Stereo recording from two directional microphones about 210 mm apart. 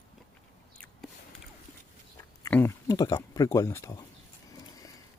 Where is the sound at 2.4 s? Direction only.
10° left (ahead or behind).